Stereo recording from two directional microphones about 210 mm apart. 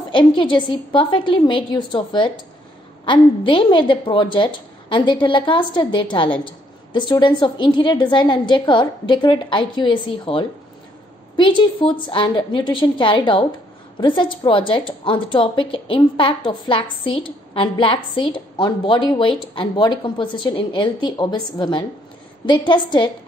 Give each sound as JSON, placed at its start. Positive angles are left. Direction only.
{"t": 0.1, "sound": "a woman's voice", "side_deg": 25}